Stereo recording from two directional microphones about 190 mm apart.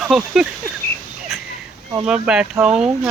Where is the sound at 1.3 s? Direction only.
Centre (ahead or behind).